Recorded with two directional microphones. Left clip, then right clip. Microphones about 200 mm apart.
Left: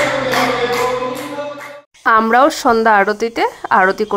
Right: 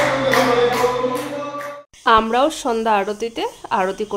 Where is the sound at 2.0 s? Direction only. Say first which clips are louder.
Left 4 dB; 20° left (ahead or behind).